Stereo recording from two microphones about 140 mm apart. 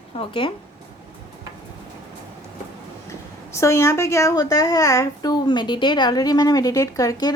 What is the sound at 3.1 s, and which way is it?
A woman's voice, 20° left (ahead or behind).